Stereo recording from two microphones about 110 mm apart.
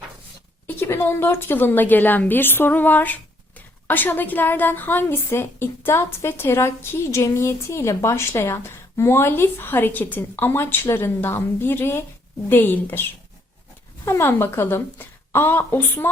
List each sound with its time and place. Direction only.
0.8 s a woman's voice: 20° left (ahead or behind)